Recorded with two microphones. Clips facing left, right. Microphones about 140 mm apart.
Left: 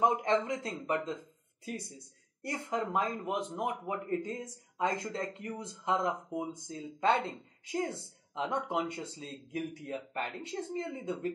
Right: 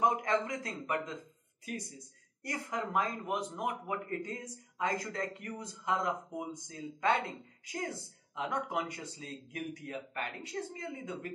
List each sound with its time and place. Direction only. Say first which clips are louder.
0.0 s a man's voice: left 2 dB; 25° left (ahead or behind)
2.4 s a man's voice: left 3 dB; 25° left (ahead or behind)